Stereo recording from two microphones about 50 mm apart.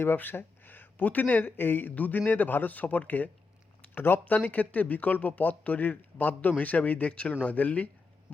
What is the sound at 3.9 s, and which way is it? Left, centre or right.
Speech, left.